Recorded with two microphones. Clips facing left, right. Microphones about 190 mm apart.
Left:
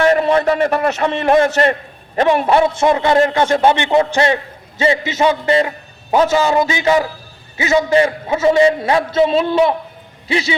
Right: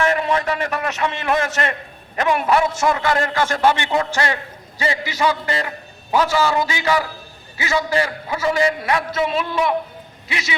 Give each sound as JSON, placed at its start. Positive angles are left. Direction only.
{"t": 0.0, "sound": "a man's voice", "side_deg": 35}